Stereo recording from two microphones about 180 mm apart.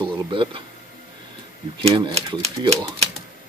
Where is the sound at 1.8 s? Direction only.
30° right (ahead or behind).